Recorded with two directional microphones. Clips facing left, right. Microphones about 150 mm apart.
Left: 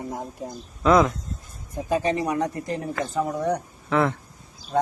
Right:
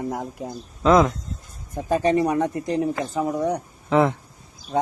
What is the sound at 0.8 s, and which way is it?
Speech, 25° right (ahead or behind).